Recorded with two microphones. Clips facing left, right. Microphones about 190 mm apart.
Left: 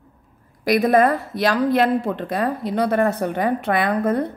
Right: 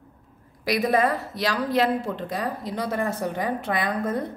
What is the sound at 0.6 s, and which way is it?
A woman's voice, 50° left (ahead or behind).